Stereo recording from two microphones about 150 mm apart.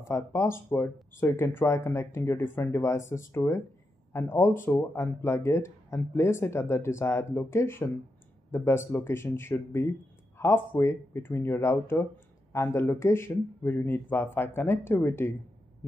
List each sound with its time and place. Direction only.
0.0 s speech: 20° left (ahead or behind)